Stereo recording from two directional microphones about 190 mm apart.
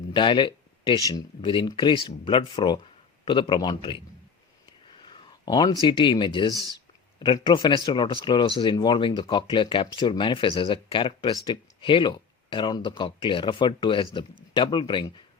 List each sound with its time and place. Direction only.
0.1 s speech: 25° left (ahead or behind)
5.0 s speech: 25° left (ahead or behind)